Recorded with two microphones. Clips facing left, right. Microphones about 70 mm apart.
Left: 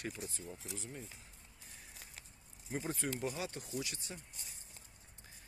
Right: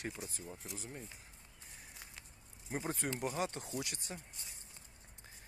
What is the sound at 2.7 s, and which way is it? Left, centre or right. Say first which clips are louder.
Speech: even; right.